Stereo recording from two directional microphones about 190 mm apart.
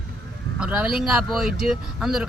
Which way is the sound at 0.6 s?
5° right (ahead or behind).